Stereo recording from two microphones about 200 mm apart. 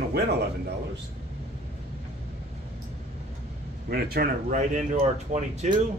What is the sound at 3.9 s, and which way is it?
Speech, 50° right (ahead or behind).